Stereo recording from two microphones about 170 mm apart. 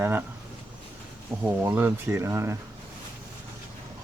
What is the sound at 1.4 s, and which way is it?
Speech, 10° right (ahead or behind).